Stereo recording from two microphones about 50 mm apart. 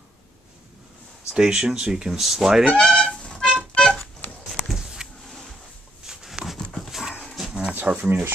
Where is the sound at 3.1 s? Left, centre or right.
Centre.